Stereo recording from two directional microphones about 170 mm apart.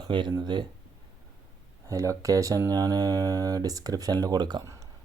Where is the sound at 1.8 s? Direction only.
20° right (ahead or behind).